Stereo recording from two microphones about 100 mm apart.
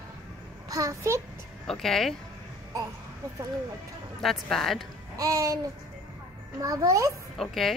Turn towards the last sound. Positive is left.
turn(degrees=0)  # may be behind; listen again after turning